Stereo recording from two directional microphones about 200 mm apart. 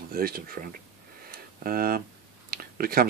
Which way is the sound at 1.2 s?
45° right (ahead or behind).